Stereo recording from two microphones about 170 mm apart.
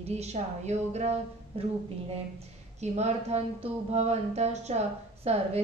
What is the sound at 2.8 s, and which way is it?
Speech, 40° right (ahead or behind).